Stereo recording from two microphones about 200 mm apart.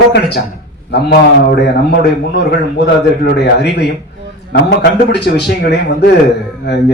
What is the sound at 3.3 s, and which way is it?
A man's voice, 55° left (ahead or behind).